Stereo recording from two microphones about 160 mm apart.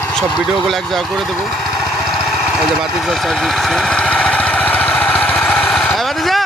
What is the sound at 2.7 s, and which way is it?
Vehicle, centre (ahead or behind).